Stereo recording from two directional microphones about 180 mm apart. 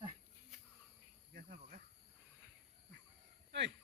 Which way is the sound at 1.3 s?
50° right (ahead or behind).